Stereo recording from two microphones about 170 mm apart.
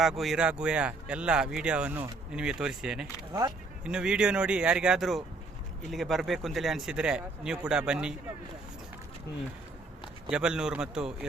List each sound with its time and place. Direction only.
0.0 s speech: centre (ahead or behind)
3.4 s speech: 20° right (ahead or behind)
3.8 s speech: 5° right (ahead or behind)
10.2 s speech: 5° right (ahead or behind)